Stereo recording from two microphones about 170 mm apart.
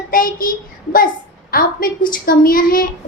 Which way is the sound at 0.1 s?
55° left (ahead or behind).